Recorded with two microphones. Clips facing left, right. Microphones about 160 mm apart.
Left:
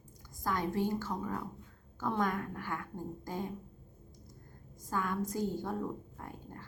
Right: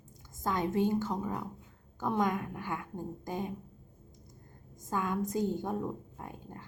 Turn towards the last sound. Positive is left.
turn(degrees=-20)  # may be behind; listen again after turning